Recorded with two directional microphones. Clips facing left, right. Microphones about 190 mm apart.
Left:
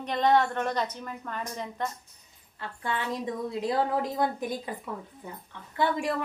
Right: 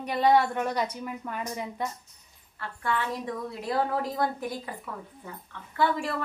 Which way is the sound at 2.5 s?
20° left (ahead or behind).